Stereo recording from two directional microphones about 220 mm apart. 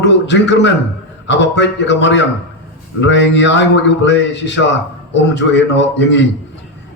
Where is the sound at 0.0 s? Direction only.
55° left (ahead or behind).